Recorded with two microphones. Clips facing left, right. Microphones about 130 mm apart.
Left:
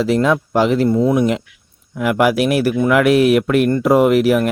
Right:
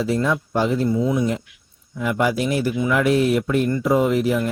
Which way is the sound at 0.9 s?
60° left (ahead or behind).